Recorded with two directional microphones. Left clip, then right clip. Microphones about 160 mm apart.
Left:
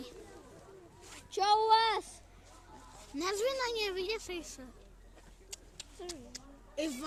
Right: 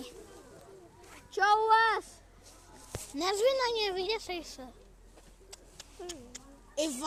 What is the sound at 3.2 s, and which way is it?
A woman's voice, 30° left (ahead or behind).